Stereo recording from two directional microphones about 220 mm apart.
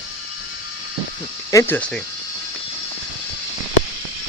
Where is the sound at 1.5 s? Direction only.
5° left (ahead or behind).